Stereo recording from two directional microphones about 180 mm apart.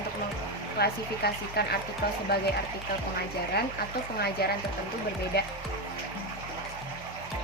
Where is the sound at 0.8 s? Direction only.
60° left (ahead or behind).